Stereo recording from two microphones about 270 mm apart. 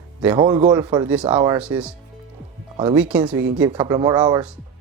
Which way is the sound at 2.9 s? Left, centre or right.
Centre.